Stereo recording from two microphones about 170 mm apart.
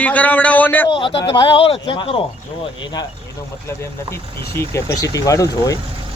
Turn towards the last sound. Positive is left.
turn(degrees=20)  # may be behind; listen again after turning